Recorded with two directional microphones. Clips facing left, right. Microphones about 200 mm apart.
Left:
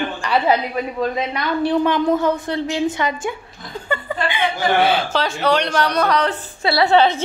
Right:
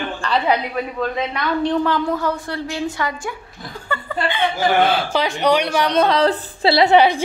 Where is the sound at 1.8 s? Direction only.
20° left (ahead or behind).